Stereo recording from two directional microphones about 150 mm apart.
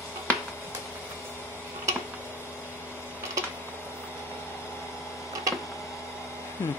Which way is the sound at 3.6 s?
15° left (ahead or behind).